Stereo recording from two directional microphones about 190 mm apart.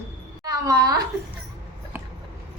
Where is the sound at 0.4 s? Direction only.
20° right (ahead or behind).